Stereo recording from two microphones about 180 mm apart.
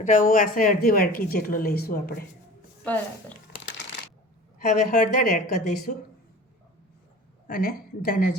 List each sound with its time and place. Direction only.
0.0 s speech: 45° left (ahead or behind)
2.8 s a woman's voice: 10° left (ahead or behind)
4.6 s a woman's voice: 45° left (ahead or behind)
7.4 s a woman's voice: 50° left (ahead or behind)